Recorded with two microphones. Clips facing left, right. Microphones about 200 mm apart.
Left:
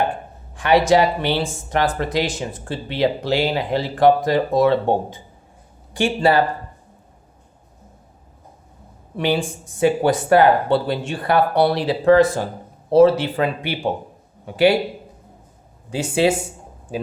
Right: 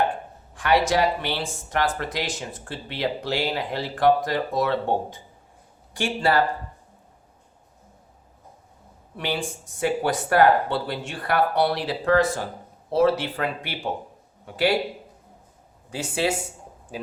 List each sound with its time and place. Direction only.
0.5 s speech: 25° left (ahead or behind)
5.9 s speech: 25° left (ahead or behind)
9.1 s a man's voice: 25° left (ahead or behind)
15.9 s speech: 25° left (ahead or behind)